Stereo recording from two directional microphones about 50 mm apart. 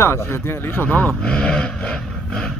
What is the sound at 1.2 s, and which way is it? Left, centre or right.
Speech, centre.